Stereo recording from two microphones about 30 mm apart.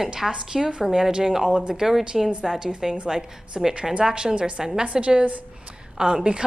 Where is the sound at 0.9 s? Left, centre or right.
Centre; by 4.7 s right.